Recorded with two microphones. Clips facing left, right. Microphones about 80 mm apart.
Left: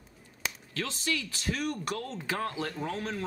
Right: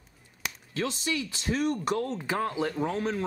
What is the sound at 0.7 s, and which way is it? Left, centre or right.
Speech, centre.